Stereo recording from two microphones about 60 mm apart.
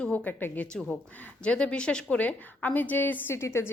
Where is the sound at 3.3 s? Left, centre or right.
Left.